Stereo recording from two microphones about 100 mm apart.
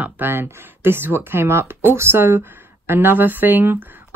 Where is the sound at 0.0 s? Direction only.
20° right (ahead or behind).